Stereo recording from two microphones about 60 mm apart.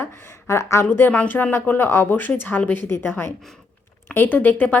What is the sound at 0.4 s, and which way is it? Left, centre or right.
Speech, left.